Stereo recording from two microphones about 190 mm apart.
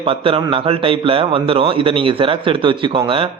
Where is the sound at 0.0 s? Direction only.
30° right (ahead or behind).